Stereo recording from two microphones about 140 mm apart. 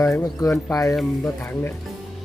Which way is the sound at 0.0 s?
20° left (ahead or behind).